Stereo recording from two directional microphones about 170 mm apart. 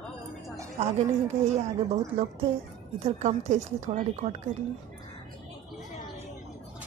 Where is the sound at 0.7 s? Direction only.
40° right (ahead or behind).